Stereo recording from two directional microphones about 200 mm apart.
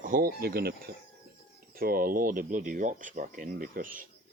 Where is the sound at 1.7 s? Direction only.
45° right (ahead or behind).